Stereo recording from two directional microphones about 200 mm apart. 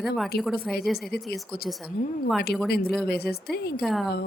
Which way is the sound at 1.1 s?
50° left (ahead or behind).